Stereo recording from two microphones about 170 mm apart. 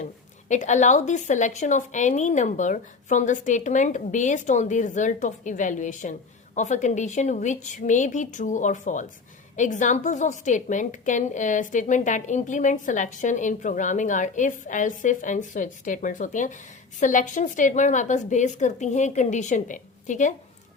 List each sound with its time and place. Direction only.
0.4 s a woman's voice: 45° left (ahead or behind)